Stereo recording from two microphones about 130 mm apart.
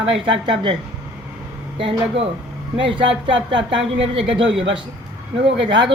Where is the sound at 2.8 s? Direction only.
40° right (ahead or behind).